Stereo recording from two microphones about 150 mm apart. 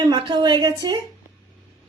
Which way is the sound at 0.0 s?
30° right (ahead or behind).